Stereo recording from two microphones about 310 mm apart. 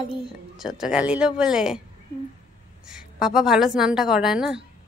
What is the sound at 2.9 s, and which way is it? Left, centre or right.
A woman's voice, centre.